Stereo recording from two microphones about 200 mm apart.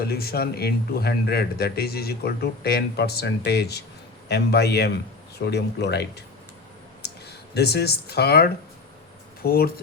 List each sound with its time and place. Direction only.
0.0 s speech: 50° left (ahead or behind)